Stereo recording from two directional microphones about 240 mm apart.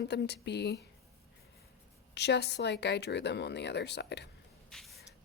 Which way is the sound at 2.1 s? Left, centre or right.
Left.